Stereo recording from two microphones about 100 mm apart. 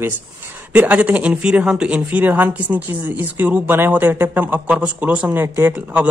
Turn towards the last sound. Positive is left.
turn(degrees=-15)  # may be behind; listen again after turning